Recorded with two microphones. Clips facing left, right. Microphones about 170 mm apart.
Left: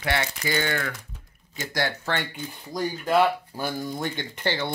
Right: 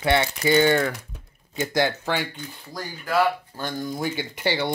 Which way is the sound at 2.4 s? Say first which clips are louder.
Left 6 dB; 20° left (ahead or behind).